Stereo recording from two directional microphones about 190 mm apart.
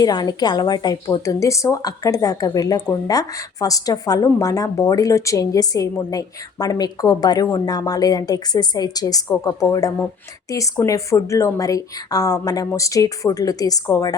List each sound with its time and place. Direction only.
0.0 s a woman's voice: 20° left (ahead or behind)